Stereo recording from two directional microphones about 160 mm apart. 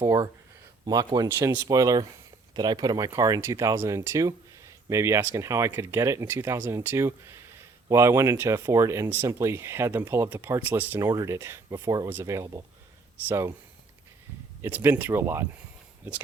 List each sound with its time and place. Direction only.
0.0 s speech: 20° right (ahead or behind)
14.6 s speech: 15° right (ahead or behind)